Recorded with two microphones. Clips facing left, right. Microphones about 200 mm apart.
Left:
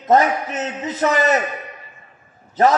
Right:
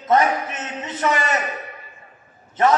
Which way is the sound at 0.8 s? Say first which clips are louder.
Left 4 dB; 40° left (ahead or behind).